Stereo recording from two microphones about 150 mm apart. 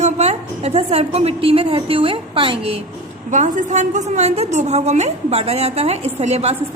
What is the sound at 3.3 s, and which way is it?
A woman's voice, 55° right (ahead or behind).